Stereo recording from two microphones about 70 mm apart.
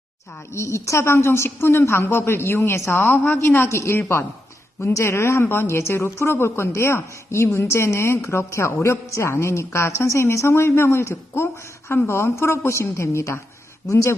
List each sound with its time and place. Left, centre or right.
0.5 s a woman's voice: left
3.0 s a woman's voice: left